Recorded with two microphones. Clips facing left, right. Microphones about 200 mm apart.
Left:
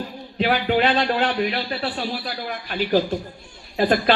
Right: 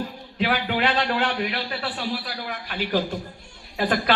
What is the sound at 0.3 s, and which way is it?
Speech, 25° left (ahead or behind).